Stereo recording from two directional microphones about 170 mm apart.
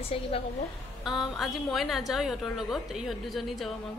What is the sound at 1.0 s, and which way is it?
A woman's voice, centre (ahead or behind).